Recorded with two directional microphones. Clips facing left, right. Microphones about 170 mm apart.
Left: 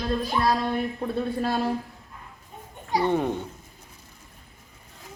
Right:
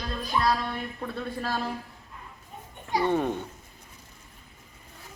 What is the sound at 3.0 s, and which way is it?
Speech, 15° left (ahead or behind).